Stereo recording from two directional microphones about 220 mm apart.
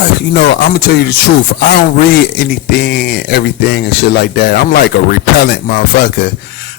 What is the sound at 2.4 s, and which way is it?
Speech, 45° left (ahead or behind).